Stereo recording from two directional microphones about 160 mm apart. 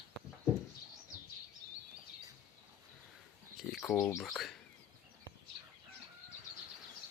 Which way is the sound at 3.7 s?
10° left (ahead or behind).